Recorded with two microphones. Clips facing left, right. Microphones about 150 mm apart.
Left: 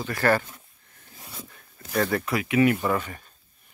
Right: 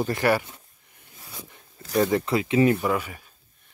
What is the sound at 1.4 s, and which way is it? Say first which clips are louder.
Zipper: even; 20° right (ahead or behind).